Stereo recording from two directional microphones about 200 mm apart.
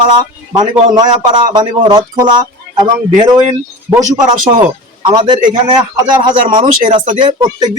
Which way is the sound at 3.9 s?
20° right (ahead or behind).